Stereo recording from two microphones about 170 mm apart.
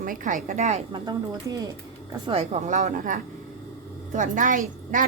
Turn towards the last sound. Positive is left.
turn(degrees=-50)  # may be behind; listen again after turning